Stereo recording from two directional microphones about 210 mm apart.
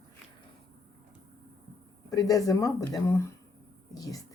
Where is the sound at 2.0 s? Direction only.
15° left (ahead or behind).